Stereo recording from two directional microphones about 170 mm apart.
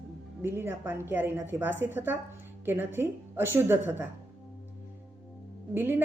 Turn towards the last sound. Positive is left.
turn(degrees=-10)  # may be behind; listen again after turning